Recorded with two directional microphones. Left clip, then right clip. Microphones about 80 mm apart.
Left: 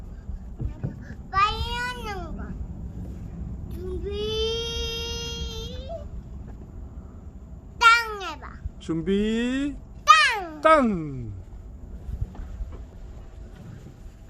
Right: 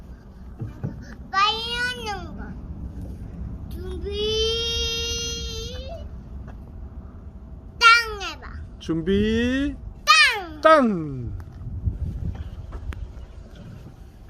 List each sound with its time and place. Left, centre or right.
1.0 s babbling: left
3.8 s baby cry: centre
7.8 s babbling: left
8.9 s speech: right
10.0 s a sound: left
10.6 s speech: right